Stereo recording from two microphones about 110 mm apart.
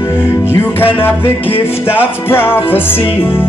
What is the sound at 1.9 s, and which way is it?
Music, 20° left (ahead or behind).